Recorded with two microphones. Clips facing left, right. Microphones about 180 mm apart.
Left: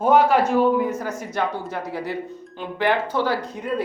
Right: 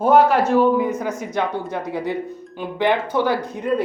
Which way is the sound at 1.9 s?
20° right (ahead or behind).